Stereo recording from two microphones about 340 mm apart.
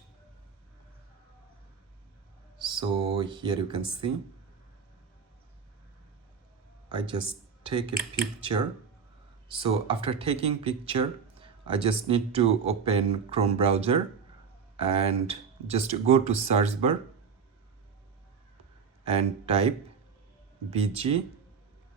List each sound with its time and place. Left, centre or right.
2.6 s speech: centre
6.8 s speech: centre
9.5 s speech: centre
19.0 s speech: centre